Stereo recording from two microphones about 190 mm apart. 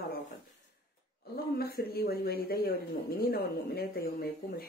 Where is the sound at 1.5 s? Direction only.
55° left (ahead or behind).